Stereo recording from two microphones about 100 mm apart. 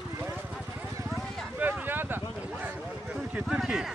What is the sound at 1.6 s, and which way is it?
Vehicle, 20° right (ahead or behind).